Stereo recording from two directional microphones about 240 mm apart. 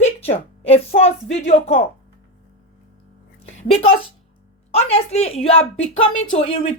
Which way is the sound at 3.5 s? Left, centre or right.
Left.